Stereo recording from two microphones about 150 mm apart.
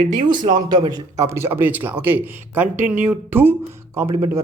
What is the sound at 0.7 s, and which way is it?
Speech, 25° right (ahead or behind).